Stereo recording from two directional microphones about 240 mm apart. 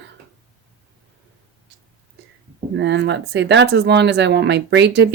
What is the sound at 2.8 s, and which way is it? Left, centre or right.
Speech, right.